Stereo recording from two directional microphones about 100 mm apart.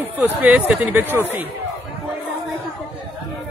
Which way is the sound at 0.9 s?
20° right (ahead or behind).